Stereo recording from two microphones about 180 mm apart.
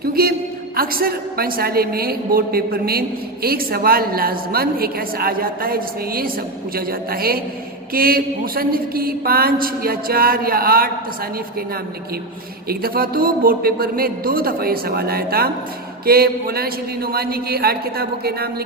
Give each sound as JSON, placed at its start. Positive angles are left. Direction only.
{"t": 0.0, "sound": "a woman's voice", "side_deg": -55}
{"t": 12.6, "sound": "a woman's voice", "side_deg": -55}